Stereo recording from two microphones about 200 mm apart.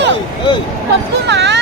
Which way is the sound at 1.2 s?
60° right (ahead or behind).